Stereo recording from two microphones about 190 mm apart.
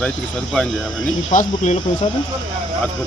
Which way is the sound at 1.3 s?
40° left (ahead or behind).